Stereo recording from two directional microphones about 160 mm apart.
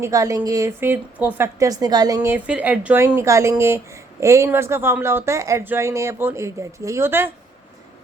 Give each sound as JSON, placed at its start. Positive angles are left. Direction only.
{"t": 0.0, "sound": "a woman's voice", "side_deg": -20}